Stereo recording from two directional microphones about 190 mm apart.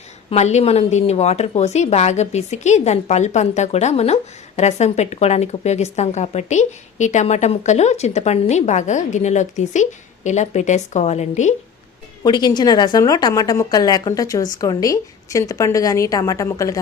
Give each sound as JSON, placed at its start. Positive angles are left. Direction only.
{"t": 0.3, "sound": "a woman's voice", "side_deg": 35}
{"t": 12.2, "sound": "a woman's voice", "side_deg": 20}